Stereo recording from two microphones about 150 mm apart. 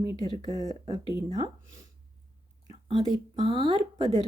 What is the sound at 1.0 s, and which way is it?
Speech, 35° left (ahead or behind).